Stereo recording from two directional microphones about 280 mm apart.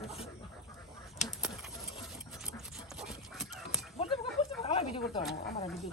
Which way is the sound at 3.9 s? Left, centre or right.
Centre.